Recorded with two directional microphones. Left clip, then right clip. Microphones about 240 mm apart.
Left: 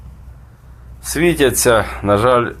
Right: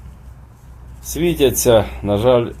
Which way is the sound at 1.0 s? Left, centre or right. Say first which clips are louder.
Left 2 dB; centre.